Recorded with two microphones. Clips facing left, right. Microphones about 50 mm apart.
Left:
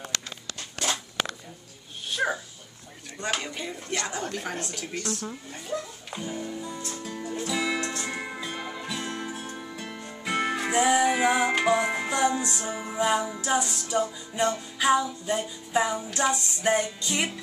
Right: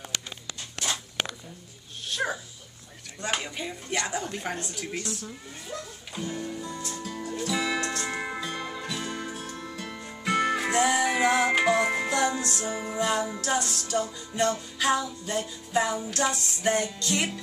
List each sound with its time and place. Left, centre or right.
2.0 s dog: centre
3.3 s speech: centre
5.7 s speech: left
6.1 s music: centre
7.8 s music: centre
8.4 s music: centre